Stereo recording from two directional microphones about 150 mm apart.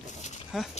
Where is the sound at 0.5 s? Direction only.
Centre (ahead or behind).